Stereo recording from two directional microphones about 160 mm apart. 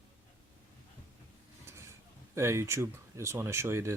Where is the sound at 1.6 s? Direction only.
15° right (ahead or behind).